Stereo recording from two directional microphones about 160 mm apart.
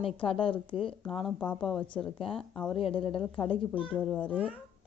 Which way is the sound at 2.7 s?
35° left (ahead or behind).